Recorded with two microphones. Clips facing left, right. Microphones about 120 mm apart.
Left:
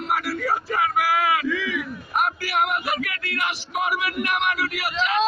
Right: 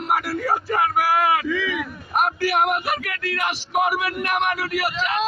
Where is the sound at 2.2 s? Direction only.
45° right (ahead or behind).